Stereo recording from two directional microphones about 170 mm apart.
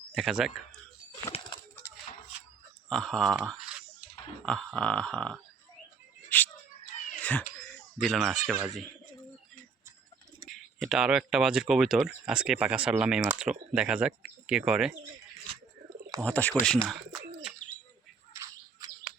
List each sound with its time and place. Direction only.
0.1 s speech: centre (ahead or behind)
2.9 s speech: 5° left (ahead or behind)
3.4 s a sound: centre (ahead or behind)
4.4 s speech: 5° left (ahead or behind)
6.3 s a sound: 10° left (ahead or behind)
8.0 s speech: centre (ahead or behind)
10.4 s speech: centre (ahead or behind)
15.4 s bird: 25° right (ahead or behind)
16.2 s speech: 10° left (ahead or behind)
18.3 s bird: 15° right (ahead or behind)